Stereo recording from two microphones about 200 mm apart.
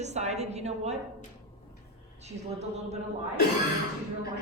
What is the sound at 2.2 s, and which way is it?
Speech, 35° right (ahead or behind).